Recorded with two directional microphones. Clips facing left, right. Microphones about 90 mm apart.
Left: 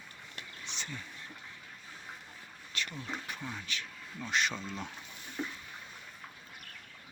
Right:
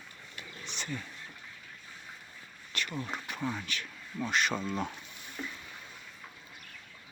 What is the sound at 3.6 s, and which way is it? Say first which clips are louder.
Speech: right 1 dB; 55° right (ahead or behind).